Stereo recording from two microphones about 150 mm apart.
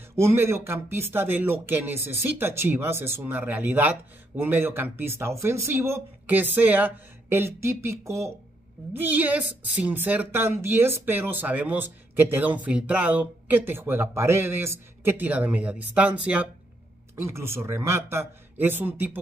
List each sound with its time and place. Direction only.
0.1 s speech: 15° right (ahead or behind)